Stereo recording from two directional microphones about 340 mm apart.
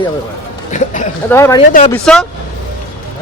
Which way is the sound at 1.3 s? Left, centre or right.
Centre.